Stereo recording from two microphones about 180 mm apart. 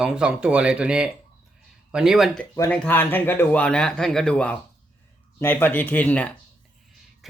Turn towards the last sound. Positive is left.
turn(degrees=10)  # may be behind; listen again after turning